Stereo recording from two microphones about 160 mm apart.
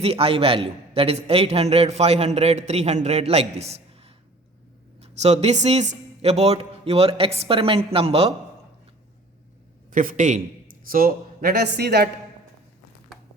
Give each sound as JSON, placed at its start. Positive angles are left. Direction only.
{"t": 0.0, "sound": "a man's voice", "side_deg": -40}
{"t": 9.9, "sound": "a man's voice", "side_deg": -55}
{"t": 10.8, "sound": "speech", "side_deg": -65}